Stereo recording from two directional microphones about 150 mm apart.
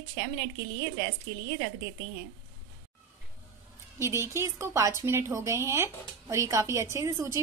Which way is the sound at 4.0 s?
20° right (ahead or behind).